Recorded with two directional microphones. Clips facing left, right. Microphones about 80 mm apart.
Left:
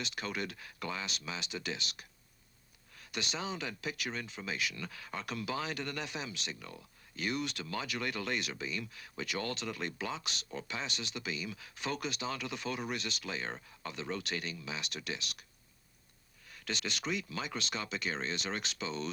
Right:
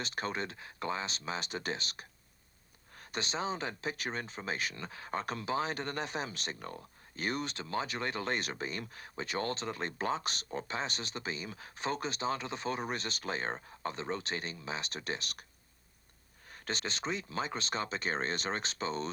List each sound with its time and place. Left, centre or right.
0.0 s speech: right
16.5 s speech: right